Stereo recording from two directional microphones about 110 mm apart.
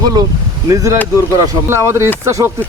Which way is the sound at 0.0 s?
35° right (ahead or behind).